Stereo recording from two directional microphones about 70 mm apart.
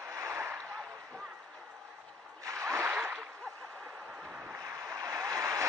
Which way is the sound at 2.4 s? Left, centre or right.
Right.